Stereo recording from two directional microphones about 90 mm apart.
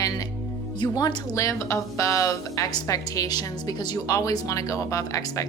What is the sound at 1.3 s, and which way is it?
A woman's voice, 35° left (ahead or behind).